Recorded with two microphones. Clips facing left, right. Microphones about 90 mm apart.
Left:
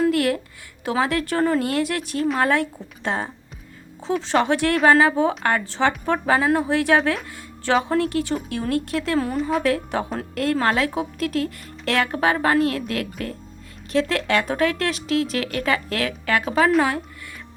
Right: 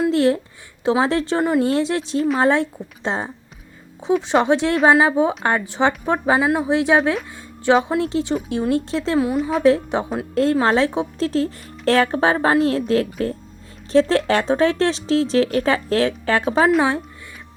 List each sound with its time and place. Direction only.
0.1 s speech: 25° right (ahead or behind)
1.6 s speech: 25° right (ahead or behind); by 6.7 s 10° right (ahead or behind)
6.7 s speech: 20° right (ahead or behind)
9.1 s speech: 5° right (ahead or behind)
9.6 s speech: 20° right (ahead or behind)